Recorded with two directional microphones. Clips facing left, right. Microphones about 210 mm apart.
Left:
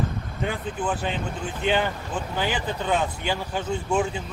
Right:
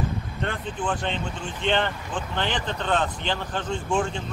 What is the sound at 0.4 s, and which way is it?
Speech, 5° left (ahead or behind).